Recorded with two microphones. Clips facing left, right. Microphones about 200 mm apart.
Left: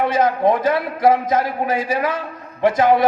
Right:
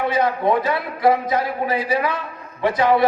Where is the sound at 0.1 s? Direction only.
45° left (ahead or behind).